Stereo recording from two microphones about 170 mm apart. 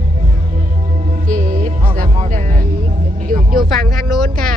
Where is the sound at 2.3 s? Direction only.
50° right (ahead or behind).